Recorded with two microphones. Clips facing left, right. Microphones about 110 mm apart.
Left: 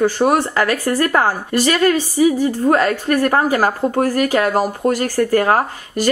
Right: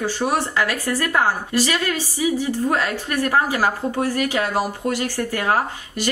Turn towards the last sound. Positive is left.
turn(degrees=45)  # may be behind; listen again after turning